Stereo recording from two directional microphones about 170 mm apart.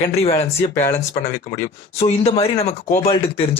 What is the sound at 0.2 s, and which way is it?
Speech, 35° left (ahead or behind).